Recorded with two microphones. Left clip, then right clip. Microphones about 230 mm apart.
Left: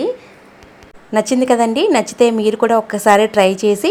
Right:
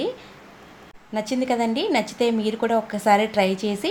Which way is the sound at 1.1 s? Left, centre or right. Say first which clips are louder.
Left 10 dB; left.